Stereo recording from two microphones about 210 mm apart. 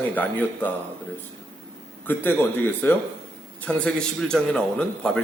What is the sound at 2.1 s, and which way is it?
A man's voice, 10° left (ahead or behind).